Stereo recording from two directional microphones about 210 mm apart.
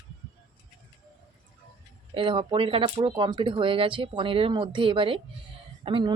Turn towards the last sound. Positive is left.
turn(degrees=-25)  # may be behind; listen again after turning